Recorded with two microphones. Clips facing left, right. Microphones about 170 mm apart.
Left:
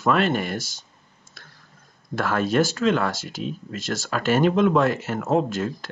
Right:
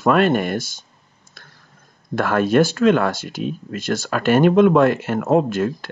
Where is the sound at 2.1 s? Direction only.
55° right (ahead or behind).